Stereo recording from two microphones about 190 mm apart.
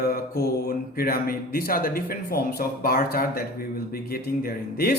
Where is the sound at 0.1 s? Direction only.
50° left (ahead or behind).